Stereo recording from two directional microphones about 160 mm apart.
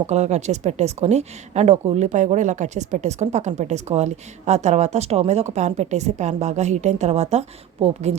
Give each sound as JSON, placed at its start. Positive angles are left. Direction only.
{"t": 0.1, "sound": "speech", "side_deg": -45}